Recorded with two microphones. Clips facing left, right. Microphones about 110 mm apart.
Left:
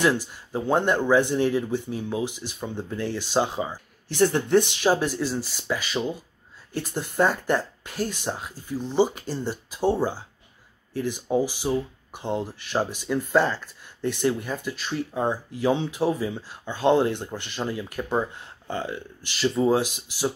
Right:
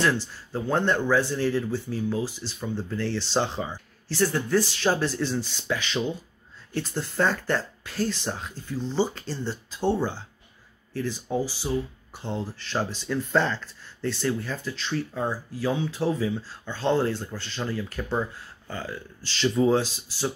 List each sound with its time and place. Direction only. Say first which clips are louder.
0.0 s speech: left 2 dB; 15° left (ahead or behind)
19.3 s speech: even; 5° left (ahead or behind)
19.8 s speech: left 2 dB; 15° left (ahead or behind)